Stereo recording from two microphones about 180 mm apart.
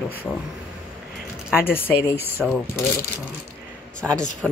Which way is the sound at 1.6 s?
10° left (ahead or behind).